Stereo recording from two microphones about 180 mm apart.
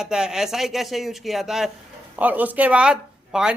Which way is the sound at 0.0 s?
5° right (ahead or behind).